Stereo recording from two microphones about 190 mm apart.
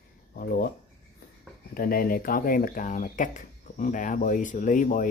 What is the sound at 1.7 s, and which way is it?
Speech, 50° left (ahead or behind).